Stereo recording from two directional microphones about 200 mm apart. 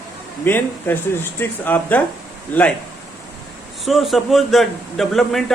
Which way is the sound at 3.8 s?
Centre (ahead or behind).